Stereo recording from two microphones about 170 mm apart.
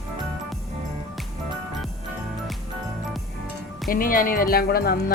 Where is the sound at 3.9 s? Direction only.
55° left (ahead or behind).